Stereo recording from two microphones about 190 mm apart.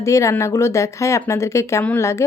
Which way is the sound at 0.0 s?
15° left (ahead or behind).